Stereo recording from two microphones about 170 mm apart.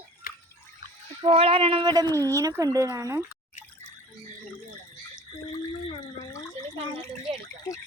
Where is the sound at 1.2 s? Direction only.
35° right (ahead or behind); by 3.2 s 20° right (ahead or behind).